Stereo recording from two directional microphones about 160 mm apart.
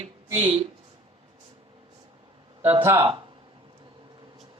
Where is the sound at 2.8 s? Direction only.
15° right (ahead or behind).